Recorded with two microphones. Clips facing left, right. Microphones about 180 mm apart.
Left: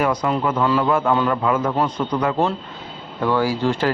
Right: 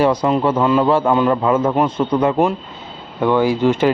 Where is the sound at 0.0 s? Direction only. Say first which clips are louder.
Right 5 dB; 30° right (ahead or behind).